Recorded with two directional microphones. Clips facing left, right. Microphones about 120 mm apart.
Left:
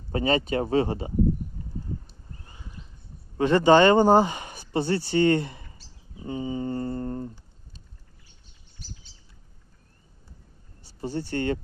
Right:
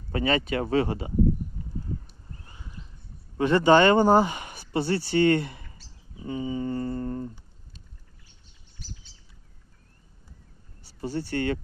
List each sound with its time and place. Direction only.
0.1 s speech: 30° left (ahead or behind)
3.3 s speech: 30° left (ahead or behind)
6.2 s speech: 40° left (ahead or behind)
11.3 s speech: 30° left (ahead or behind)